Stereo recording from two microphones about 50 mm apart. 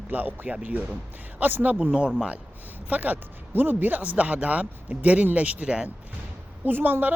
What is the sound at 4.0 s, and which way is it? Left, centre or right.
Speech, right.